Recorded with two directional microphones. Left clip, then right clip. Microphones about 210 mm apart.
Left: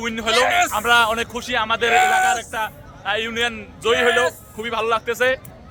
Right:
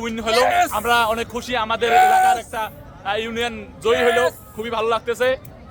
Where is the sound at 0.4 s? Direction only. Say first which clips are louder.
Right 1 dB; 10° right (ahead or behind).